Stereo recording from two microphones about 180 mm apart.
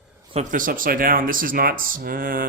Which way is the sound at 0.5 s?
50° right (ahead or behind).